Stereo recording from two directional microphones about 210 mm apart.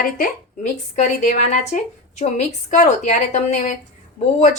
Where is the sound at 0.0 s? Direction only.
35° left (ahead or behind).